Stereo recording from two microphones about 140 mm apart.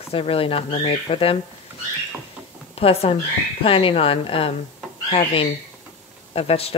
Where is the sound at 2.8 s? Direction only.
45° left (ahead or behind).